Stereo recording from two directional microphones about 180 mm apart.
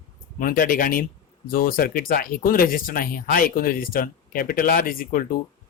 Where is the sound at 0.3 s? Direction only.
50° left (ahead or behind).